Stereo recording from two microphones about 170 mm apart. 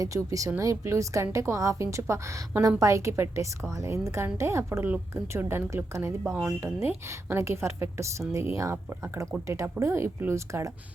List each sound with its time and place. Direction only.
0.0 s a woman's voice: 20° right (ahead or behind)